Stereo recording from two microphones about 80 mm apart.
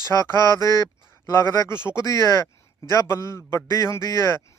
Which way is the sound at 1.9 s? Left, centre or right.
Left.